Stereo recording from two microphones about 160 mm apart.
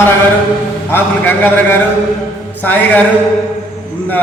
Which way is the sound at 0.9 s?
15° left (ahead or behind).